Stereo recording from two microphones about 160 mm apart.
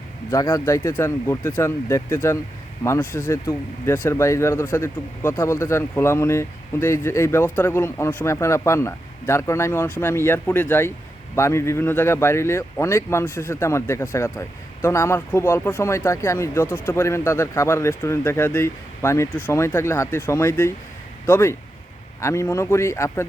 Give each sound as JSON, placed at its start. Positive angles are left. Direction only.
{"t": 0.3, "sound": "speech", "side_deg": 20}